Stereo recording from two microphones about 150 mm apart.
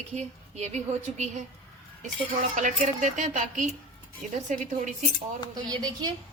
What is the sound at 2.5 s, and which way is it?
Speech, 55° right (ahead or behind).